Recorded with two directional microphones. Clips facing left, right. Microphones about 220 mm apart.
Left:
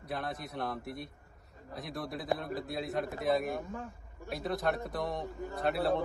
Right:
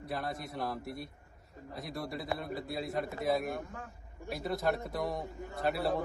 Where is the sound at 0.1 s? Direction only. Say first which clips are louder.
Even; centre (ahead or behind).